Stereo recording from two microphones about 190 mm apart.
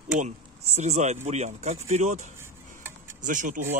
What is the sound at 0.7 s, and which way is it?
Speech, 35° right (ahead or behind).